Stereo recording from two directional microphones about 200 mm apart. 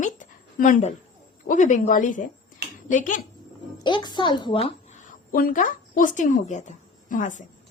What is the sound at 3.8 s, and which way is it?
A woman's voice, 20° left (ahead or behind).